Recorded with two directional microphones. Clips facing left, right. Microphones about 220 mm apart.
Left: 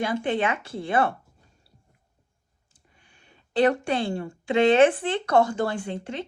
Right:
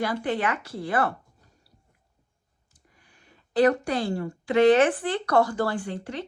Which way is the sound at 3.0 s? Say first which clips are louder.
Even; 25° left (ahead or behind).